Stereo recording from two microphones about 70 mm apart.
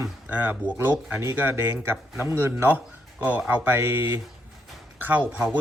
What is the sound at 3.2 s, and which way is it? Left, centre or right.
Speech, right.